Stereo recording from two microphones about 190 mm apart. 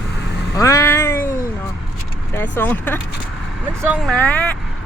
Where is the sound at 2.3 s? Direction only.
10° left (ahead or behind).